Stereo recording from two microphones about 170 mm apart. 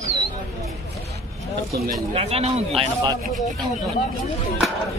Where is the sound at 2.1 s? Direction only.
35° right (ahead or behind).